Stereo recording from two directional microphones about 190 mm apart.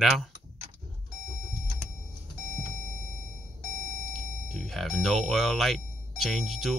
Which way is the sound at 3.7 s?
45° left (ahead or behind).